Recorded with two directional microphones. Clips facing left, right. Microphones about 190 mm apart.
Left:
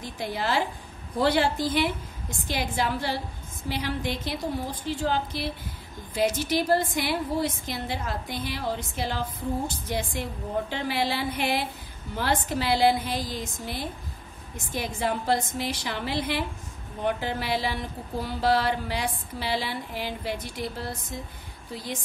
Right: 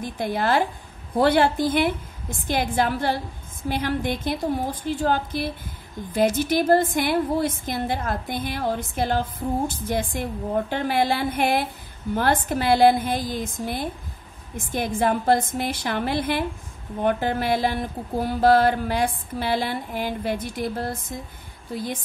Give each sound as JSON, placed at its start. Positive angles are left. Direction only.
{"t": 0.0, "sound": "mantra", "side_deg": -50}